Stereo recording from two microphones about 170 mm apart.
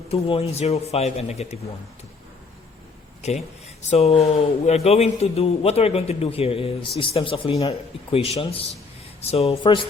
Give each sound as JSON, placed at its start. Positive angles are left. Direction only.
{"t": 0.1, "sound": "a man's voice", "side_deg": 35}
{"t": 3.2, "sound": "a man's voice", "side_deg": 40}